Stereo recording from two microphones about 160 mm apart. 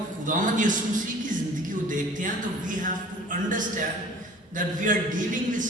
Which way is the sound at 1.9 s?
55° right (ahead or behind).